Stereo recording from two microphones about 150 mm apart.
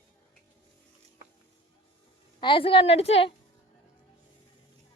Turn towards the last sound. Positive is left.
turn(degrees=40)  # may be behind; listen again after turning